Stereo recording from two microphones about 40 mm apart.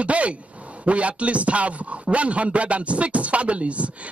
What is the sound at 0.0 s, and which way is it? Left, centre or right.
Speech, right.